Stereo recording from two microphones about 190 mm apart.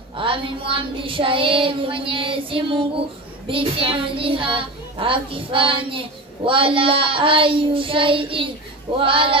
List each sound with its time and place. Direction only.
0.2 s child singing: 25° right (ahead or behind)